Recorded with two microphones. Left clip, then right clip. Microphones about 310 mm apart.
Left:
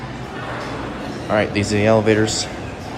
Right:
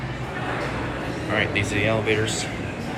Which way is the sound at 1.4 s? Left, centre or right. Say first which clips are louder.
Left 4 dB; left.